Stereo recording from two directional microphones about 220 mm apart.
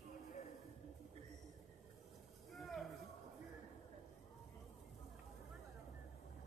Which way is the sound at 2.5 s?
Centre (ahead or behind).